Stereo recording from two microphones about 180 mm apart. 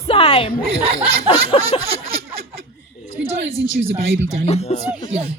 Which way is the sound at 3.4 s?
90° right.